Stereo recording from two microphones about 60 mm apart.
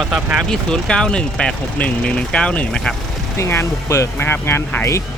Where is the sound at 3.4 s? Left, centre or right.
Left.